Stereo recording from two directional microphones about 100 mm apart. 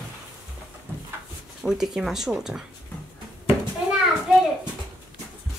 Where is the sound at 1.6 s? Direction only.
5° right (ahead or behind).